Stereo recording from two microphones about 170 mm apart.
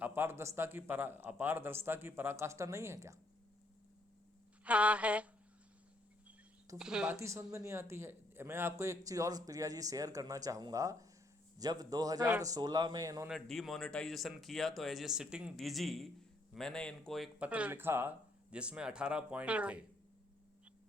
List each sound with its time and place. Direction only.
0.0 s speech: 15° right (ahead or behind)
4.6 s speech: 10° right (ahead or behind)
6.7 s speech: 5° right (ahead or behind)
7.2 s a man's voice: 15° right (ahead or behind)
13.2 s speech: centre (ahead or behind)